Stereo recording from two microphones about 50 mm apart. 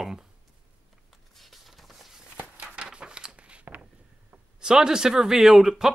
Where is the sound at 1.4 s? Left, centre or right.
Centre.